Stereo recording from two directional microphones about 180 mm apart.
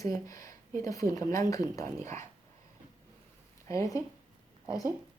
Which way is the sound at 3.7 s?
15° left (ahead or behind).